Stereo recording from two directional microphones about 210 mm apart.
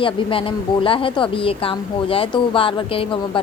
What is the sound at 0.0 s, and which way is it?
A woman's voice, 25° left (ahead or behind).